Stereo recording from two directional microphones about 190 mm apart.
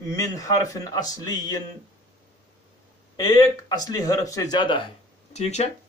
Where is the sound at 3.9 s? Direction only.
20° left (ahead or behind); by 5.7 s 35° left (ahead or behind).